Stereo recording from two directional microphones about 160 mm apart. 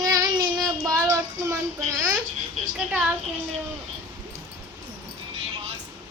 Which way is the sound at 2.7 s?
Centre (ahead or behind).